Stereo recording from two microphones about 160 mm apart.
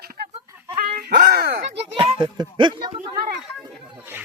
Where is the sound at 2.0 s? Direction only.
30° right (ahead or behind).